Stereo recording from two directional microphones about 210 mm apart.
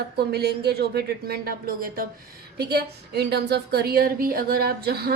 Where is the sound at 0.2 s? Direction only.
50° right (ahead or behind).